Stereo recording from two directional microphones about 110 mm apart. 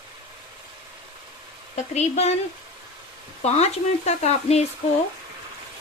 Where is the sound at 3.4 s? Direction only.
75° left (ahead or behind).